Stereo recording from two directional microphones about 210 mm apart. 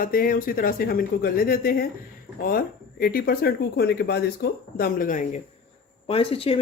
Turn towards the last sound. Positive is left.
turn(degrees=25)  # may be behind; listen again after turning